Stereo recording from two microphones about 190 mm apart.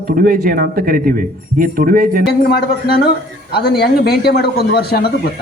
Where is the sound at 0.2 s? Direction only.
50° right (ahead or behind).